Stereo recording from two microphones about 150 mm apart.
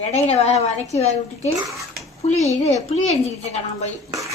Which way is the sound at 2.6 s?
45° left (ahead or behind).